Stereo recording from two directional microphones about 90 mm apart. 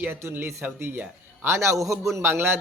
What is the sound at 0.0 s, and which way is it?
Speech, 25° right (ahead or behind).